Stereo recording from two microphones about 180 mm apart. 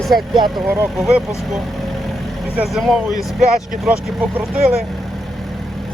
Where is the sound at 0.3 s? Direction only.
25° right (ahead or behind).